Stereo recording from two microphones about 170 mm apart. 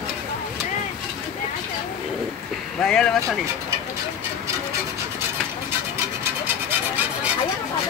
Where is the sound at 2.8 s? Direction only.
5° left (ahead or behind).